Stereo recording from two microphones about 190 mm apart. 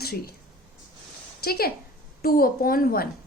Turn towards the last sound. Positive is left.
turn(degrees=50)  # may be behind; listen again after turning